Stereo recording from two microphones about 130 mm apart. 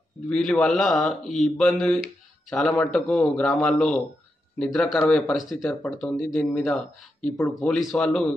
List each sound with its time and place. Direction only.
0.3 s speech: centre (ahead or behind)
7.3 s speech: 20° left (ahead or behind)
7.6 s speech: 5° left (ahead or behind)